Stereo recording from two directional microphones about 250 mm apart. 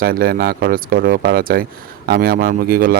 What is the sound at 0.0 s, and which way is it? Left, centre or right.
Speech, right.